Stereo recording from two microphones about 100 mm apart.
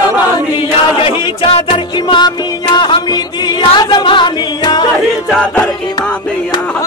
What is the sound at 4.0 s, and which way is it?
Music, 55° left (ahead or behind).